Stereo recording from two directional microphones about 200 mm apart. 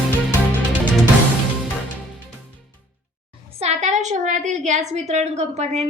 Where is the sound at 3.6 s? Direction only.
35° right (ahead or behind).